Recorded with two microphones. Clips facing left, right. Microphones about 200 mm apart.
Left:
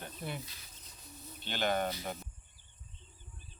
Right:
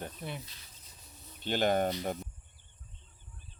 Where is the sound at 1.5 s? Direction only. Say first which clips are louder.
Right 5 dB; 45° right (ahead or behind).